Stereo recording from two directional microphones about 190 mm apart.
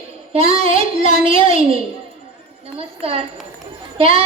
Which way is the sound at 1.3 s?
30° right (ahead or behind).